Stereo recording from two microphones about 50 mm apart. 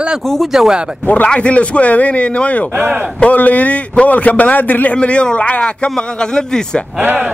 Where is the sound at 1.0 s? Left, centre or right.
Left.